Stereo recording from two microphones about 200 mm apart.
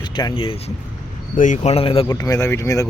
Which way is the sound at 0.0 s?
20° left (ahead or behind).